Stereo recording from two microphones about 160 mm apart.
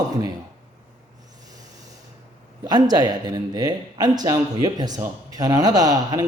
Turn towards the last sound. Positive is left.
turn(degrees=-25)  # may be behind; listen again after turning